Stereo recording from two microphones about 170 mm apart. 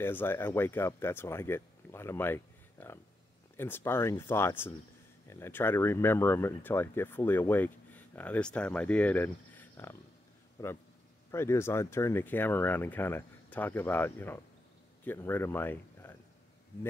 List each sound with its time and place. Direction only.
0.0 s speech: 10° left (ahead or behind)